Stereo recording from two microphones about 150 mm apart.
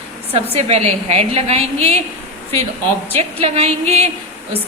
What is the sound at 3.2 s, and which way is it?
Speech, 45° right (ahead or behind).